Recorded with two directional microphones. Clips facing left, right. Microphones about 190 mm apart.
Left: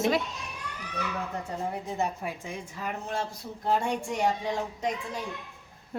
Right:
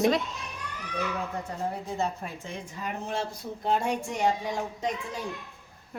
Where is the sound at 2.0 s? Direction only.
15° left (ahead or behind).